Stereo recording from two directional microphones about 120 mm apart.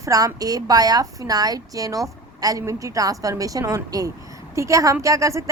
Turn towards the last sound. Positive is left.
turn(degrees=-25)  # may be behind; listen again after turning